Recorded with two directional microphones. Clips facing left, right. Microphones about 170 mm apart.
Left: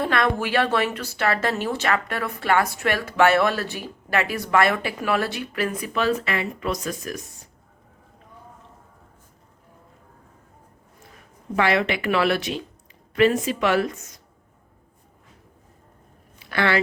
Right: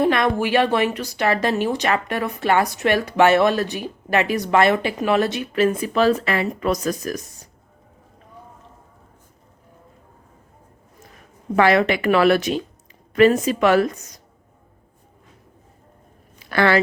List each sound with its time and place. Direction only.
0.0 s speech: 20° right (ahead or behind); by 7.3 s 40° right (ahead or behind)
11.5 s speech: 45° right (ahead or behind)
16.5 s speech: 40° right (ahead or behind)